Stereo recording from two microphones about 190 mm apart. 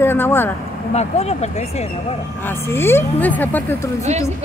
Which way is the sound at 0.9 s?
35° left (ahead or behind).